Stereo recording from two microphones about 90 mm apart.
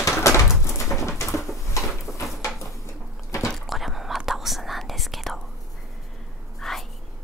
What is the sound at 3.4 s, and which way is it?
Whispering, centre (ahead or behind).